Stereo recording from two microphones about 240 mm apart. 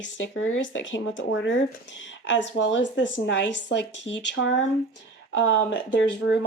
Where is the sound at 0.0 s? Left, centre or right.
Left.